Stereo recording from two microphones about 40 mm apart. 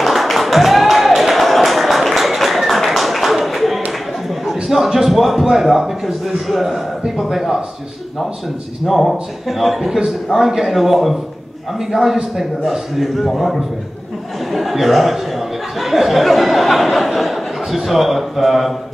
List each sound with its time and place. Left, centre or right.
0.0 s a sound: centre
7.2 s a man's voice: centre
8.8 s a man's voice: centre